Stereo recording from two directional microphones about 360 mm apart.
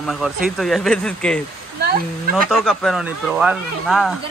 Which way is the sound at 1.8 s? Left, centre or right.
Right.